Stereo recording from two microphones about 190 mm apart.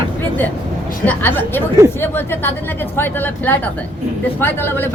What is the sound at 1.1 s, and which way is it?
Speech, 10° left (ahead or behind).